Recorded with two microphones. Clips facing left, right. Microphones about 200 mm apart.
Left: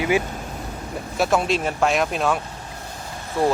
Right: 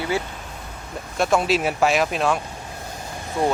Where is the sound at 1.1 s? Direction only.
Centre (ahead or behind).